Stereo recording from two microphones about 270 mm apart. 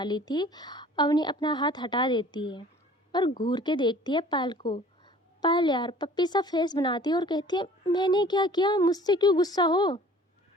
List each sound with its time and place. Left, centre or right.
0.0 s speech: centre